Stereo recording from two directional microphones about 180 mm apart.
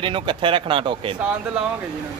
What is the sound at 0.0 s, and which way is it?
Speech, 25° right (ahead or behind).